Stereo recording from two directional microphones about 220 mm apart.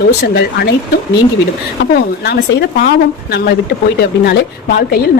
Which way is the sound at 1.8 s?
45° left (ahead or behind).